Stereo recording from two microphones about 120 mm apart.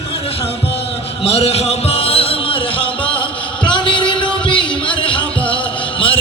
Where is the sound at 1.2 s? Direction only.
55° left (ahead or behind).